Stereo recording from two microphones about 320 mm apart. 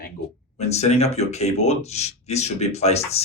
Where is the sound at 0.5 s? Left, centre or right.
Centre.